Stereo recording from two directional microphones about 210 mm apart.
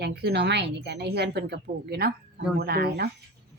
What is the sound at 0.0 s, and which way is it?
A woman's voice, 50° right (ahead or behind).